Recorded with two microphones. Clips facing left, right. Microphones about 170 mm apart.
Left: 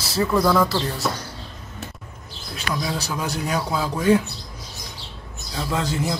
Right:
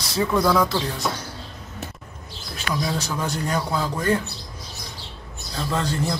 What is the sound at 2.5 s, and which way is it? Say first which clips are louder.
Speech: right 1 dB; centre (ahead or behind).